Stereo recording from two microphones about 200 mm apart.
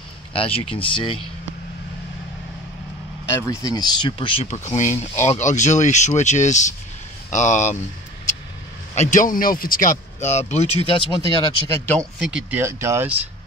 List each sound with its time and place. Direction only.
0.3 s speech: 30° left (ahead or behind)
3.3 s speech: 20° left (ahead or behind); by 7.7 s 35° left (ahead or behind)
8.9 s speech: 35° left (ahead or behind); by 12.0 s 10° left (ahead or behind)
12.2 s speech: 5° right (ahead or behind)